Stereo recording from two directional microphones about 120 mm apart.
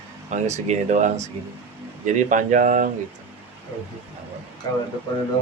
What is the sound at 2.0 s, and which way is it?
Speech, 90° right.